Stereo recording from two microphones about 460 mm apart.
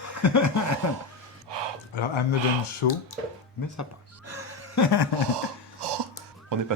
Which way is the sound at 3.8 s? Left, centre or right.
Left.